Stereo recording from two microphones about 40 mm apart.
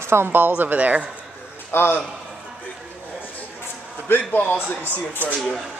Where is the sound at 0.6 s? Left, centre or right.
Right.